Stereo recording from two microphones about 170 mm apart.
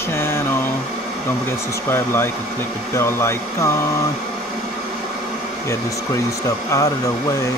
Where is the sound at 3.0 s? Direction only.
15° left (ahead or behind).